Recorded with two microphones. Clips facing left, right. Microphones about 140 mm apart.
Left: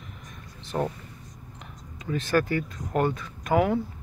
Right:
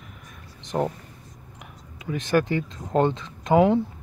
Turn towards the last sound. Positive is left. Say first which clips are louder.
# right 5 dB
turn(degrees=-25)  # may be behind; listen again after turning